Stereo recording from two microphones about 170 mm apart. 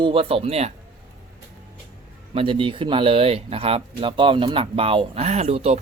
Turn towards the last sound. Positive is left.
turn(degrees=-40)  # may be behind; listen again after turning